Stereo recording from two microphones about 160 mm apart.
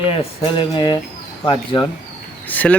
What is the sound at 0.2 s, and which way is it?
Speech, 30° left (ahead or behind).